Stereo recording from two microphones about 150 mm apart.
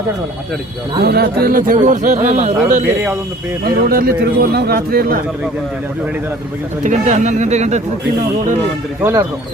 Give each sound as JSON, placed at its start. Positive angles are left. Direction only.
{"t": 1.0, "sound": "a man's voice", "side_deg": -90}
{"t": 3.6, "sound": "speech", "side_deg": -85}
{"t": 6.8, "sound": "speech", "side_deg": -50}